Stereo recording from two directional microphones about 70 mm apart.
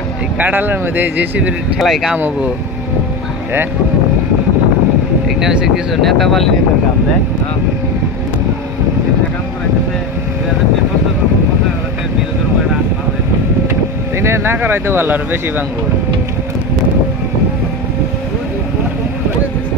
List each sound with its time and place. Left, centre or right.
0.4 s speech: right
1.8 s speech: centre
5.4 s speech: centre
6.0 s speech: centre
14.2 s speech: right